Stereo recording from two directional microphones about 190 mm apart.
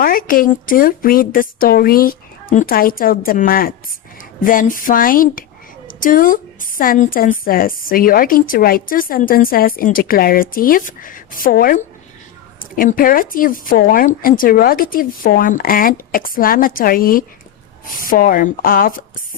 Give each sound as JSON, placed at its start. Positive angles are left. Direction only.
{"t": 0.0, "sound": "a woman's voice", "side_deg": 50}